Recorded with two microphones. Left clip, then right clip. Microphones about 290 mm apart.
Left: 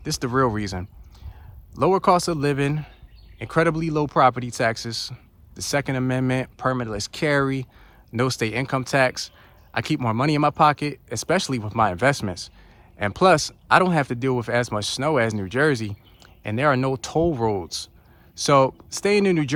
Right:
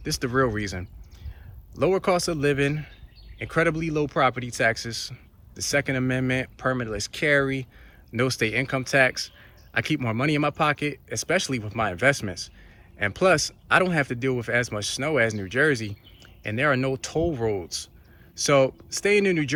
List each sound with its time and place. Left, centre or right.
0.0 s speech: centre